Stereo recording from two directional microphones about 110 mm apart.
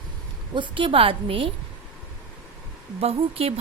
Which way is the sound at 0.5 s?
45° right (ahead or behind).